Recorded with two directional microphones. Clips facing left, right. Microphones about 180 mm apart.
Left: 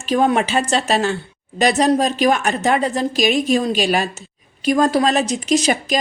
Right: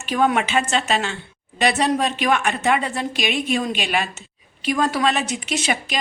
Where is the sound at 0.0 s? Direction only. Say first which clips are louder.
Left 3 dB; 35° left (ahead or behind).